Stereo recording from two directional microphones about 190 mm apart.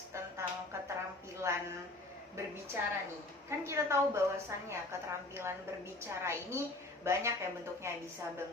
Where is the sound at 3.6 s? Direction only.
15° right (ahead or behind).